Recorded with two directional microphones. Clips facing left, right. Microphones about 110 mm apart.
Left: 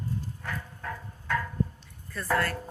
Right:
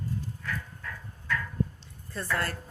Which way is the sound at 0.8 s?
50° left (ahead or behind).